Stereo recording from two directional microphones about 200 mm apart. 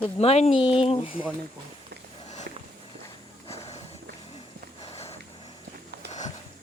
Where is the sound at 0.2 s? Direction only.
30° left (ahead or behind).